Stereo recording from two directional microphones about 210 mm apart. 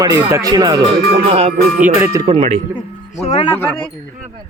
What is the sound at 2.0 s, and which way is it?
Music, 15° right (ahead or behind).